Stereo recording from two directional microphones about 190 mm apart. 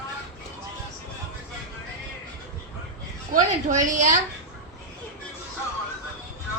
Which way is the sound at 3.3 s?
40° right (ahead or behind).